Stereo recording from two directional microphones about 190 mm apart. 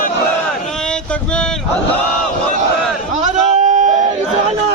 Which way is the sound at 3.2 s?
40° right (ahead or behind).